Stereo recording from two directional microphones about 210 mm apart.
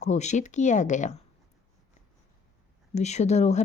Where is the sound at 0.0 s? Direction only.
35° left (ahead or behind).